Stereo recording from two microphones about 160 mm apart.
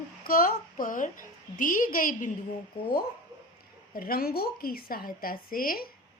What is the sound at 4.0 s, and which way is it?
A woman's voice, 65° left (ahead or behind).